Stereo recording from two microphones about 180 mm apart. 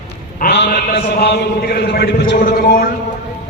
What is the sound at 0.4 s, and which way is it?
A man's voice, 70° left (ahead or behind).